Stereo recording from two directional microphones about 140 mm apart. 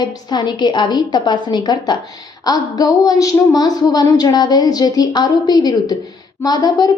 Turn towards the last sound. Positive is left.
turn(degrees=25)  # may be behind; listen again after turning